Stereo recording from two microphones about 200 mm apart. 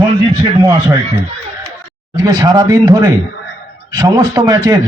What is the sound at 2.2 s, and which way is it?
A man's voice, 20° right (ahead or behind).